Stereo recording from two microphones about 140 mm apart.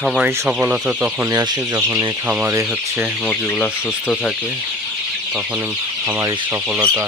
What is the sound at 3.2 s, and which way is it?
Speech, 10° left (ahead or behind).